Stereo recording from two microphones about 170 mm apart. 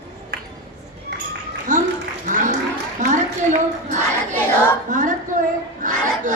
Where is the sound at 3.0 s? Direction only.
45° right (ahead or behind).